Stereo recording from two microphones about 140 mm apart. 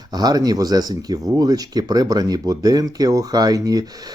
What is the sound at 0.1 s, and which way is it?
Speech, 30° right (ahead or behind).